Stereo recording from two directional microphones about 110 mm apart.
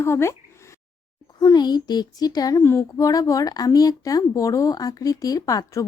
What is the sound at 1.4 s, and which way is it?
A woman's voice, 40° left (ahead or behind).